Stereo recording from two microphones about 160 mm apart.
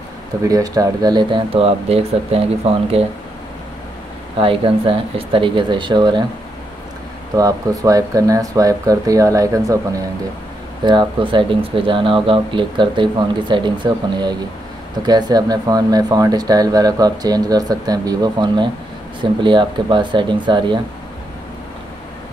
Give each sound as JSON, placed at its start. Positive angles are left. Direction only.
{"t": 0.4, "sound": "speech", "side_deg": -20}
{"t": 4.4, "sound": "speech", "side_deg": -35}
{"t": 7.3, "sound": "speech", "side_deg": -20}
{"t": 10.8, "sound": "speech", "side_deg": -30}